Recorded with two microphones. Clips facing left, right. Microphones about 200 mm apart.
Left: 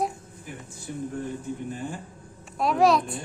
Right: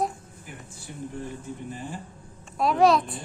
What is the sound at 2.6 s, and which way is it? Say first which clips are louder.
Speech: right 1 dB; centre (ahead or behind).